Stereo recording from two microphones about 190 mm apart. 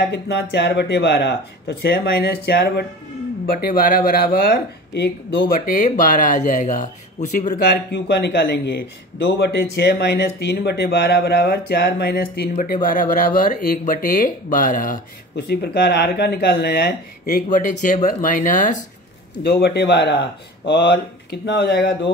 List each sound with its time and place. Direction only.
0.1 s speech: 65° left (ahead or behind)
3.4 s speech: 45° left (ahead or behind); by 5.5 s 65° left (ahead or behind)
5.5 s speech: 45° left (ahead or behind)
15.3 s speech: 55° left (ahead or behind)
19.4 s speech: 55° left (ahead or behind)